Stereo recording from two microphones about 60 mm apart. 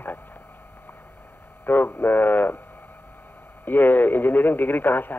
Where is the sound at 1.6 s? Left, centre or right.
Left.